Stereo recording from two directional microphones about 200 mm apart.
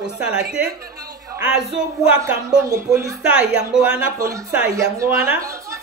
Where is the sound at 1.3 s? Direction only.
5° right (ahead or behind).